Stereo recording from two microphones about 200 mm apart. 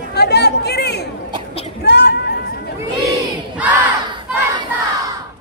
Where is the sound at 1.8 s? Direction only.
55° left (ahead or behind).